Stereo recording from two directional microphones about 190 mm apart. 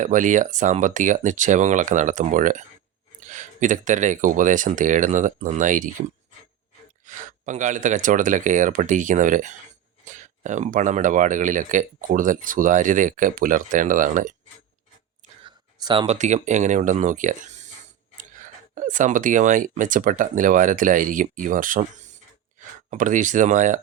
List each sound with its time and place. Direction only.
0.0 s speech: 40° right (ahead or behind)
7.3 s speech: 40° right (ahead or behind)
15.8 s speech: 25° right (ahead or behind)
16.1 s speech: 40° right (ahead or behind)
22.9 s speech: 40° right (ahead or behind)